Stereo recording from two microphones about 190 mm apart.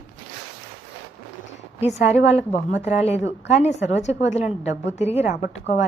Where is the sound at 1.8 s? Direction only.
35° left (ahead or behind).